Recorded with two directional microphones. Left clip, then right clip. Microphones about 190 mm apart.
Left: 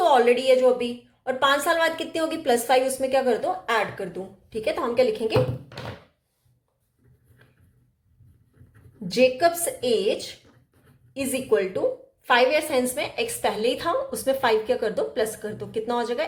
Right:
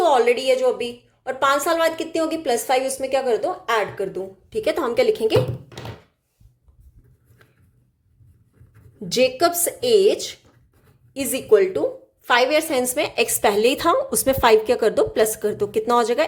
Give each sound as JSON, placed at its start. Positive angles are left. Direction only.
{"t": 0.0, "sound": "a woman's voice", "side_deg": -20}
{"t": 9.0, "sound": "a woman's voice", "side_deg": -30}
{"t": 13.0, "sound": "a woman's voice", "side_deg": -40}